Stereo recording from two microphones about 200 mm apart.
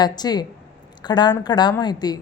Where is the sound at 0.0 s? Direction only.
20° left (ahead or behind).